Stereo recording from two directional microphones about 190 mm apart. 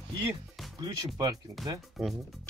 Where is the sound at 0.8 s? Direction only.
20° right (ahead or behind).